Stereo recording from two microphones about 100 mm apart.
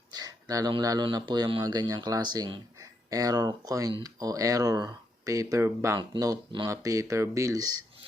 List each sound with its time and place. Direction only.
0.1 s a sound: 40° right (ahead or behind)
0.8 s speech: 40° right (ahead or behind); by 1.6 s 55° right (ahead or behind)
1.6 s speech: 40° right (ahead or behind)